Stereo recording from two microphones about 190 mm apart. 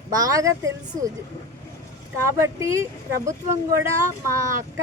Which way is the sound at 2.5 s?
15° right (ahead or behind).